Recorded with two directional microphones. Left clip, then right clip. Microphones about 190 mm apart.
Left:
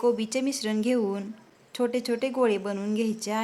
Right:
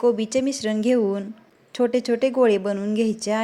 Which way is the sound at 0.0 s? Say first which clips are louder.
Right 5 dB; 15° right (ahead or behind).